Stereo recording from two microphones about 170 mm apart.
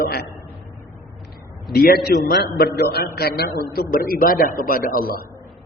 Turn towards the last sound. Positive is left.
turn(degrees=60)  # may be behind; listen again after turning